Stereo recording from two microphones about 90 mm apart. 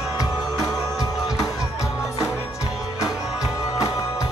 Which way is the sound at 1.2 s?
Centre (ahead or behind).